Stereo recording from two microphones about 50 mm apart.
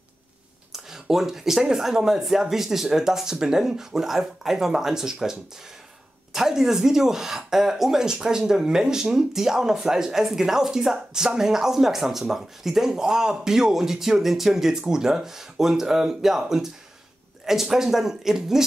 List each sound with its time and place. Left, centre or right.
0.7 s speech: centre